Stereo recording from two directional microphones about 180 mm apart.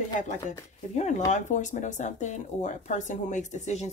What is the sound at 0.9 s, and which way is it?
Speech, 40° left (ahead or behind).